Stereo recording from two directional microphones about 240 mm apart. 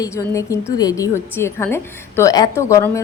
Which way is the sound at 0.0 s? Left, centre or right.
Centre.